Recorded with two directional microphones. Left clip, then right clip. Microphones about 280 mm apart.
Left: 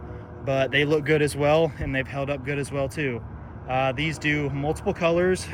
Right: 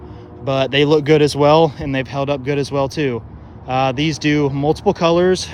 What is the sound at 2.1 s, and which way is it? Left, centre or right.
Speech, centre.